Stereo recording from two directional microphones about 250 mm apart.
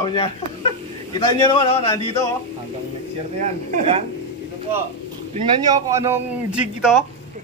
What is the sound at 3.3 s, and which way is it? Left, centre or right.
Speech, right.